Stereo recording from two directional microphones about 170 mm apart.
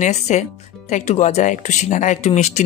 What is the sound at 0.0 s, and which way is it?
Speech, 45° left (ahead or behind).